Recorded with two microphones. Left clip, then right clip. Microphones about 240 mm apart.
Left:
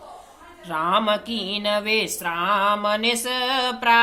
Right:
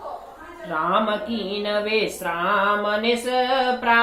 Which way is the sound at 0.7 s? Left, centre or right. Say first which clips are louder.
Left 1 dB; left.